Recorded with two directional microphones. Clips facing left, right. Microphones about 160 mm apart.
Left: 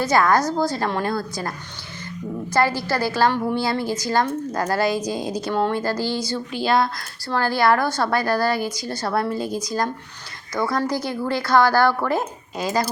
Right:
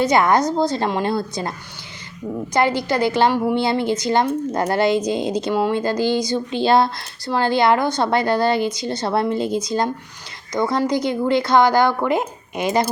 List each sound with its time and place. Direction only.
0.0 s a woman's voice: 20° right (ahead or behind)